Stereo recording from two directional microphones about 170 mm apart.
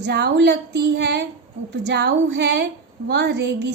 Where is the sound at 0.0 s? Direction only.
85° right.